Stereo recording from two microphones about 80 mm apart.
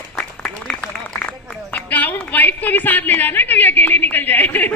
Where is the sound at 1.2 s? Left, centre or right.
Centre.